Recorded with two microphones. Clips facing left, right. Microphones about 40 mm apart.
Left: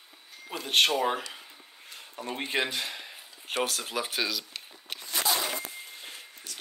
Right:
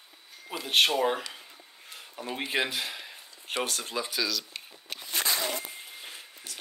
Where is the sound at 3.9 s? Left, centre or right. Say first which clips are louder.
Even; left.